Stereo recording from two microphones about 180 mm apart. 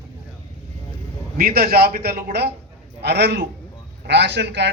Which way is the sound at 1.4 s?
55° right (ahead or behind).